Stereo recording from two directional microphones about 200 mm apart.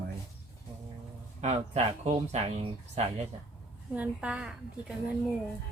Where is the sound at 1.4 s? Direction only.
35° right (ahead or behind).